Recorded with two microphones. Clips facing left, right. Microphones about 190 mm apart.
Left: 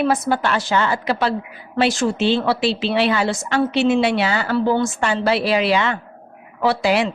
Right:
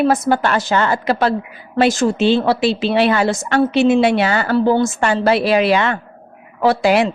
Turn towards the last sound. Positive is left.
turn(degrees=-50)  # may be behind; listen again after turning